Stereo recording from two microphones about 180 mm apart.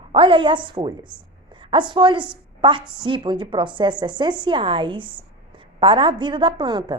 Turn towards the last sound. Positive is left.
turn(degrees=-25)  # may be behind; listen again after turning